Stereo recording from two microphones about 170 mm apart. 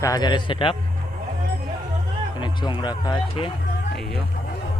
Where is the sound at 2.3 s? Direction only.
25° left (ahead or behind).